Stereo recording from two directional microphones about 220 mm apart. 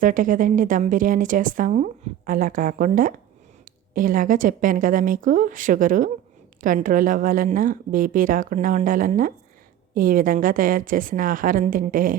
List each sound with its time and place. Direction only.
0.0 s a woman's voice: 35° right (ahead or behind)